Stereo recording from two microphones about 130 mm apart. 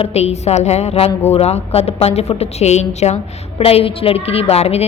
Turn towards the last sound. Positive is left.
turn(degrees=50)  # may be behind; listen again after turning